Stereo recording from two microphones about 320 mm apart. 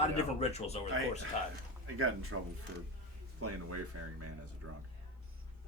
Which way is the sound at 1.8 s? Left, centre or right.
Right.